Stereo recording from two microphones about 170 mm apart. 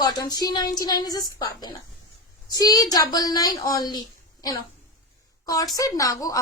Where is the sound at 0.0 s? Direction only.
25° left (ahead or behind).